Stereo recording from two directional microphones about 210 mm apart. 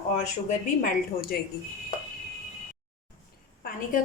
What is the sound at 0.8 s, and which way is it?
Speech, 45° left (ahead or behind).